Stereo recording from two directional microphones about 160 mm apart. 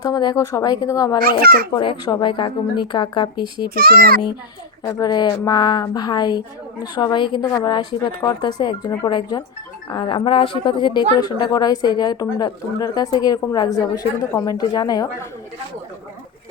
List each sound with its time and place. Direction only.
0.0 s speech: 25° left (ahead or behind)
1.2 s a child's voice: 70° right (ahead or behind)
1.7 s speech: 30° left (ahead or behind)
3.8 s a child's voice: 70° right (ahead or behind)
4.8 s speech: 25° left (ahead or behind)